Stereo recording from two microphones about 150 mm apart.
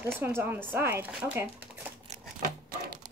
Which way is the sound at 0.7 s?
15° right (ahead or behind).